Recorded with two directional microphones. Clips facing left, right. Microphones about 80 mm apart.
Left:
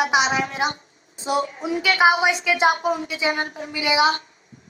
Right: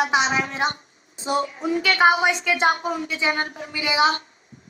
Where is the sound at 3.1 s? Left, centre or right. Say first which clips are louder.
Even; right.